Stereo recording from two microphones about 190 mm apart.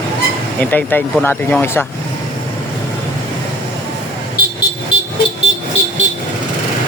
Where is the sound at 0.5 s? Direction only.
10° left (ahead or behind).